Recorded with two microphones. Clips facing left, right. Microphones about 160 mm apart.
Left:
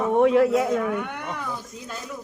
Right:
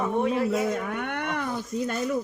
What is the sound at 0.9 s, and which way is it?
Speech, 70° right (ahead or behind).